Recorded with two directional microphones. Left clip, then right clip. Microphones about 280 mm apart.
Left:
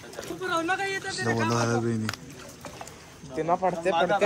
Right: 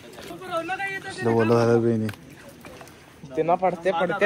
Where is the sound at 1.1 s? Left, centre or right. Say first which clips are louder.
Right 8 dB; centre.